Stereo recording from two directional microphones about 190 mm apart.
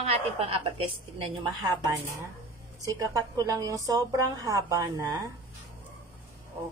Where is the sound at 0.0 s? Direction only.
30° right (ahead or behind).